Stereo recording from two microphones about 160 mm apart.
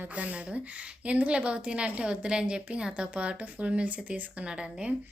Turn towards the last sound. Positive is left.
turn(degrees=-5)  # may be behind; listen again after turning